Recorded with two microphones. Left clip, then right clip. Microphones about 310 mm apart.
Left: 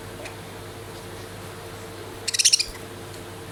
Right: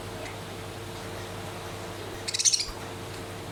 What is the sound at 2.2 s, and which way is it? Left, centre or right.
Owl, left.